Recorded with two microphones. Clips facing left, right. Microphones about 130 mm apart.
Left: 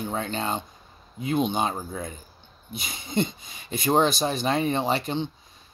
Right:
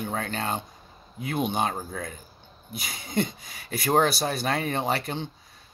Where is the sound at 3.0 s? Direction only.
25° left (ahead or behind).